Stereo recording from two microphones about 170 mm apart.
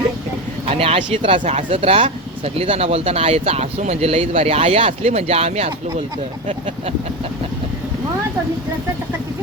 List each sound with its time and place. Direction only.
0.7 s speech: 35° right (ahead or behind)